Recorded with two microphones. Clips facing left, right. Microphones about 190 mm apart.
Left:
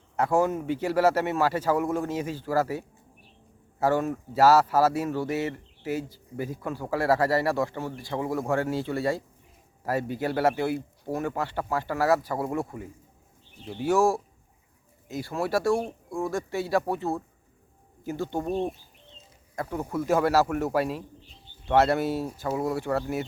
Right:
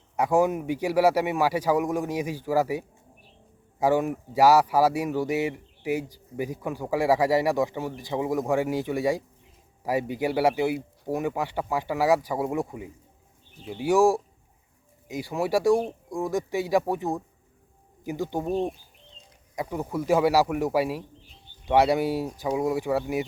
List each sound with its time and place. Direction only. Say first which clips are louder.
0.2 s speech: right 2 dB; 15° right (ahead or behind)
19.5 s speech: right 1 dB; 10° right (ahead or behind)